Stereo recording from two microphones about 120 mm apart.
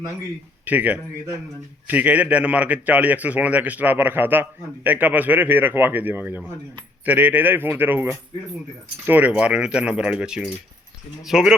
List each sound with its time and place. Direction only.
0.6 s a man's voice: 15° right (ahead or behind)